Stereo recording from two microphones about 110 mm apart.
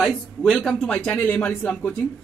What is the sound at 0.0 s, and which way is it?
Speech, 5° right (ahead or behind).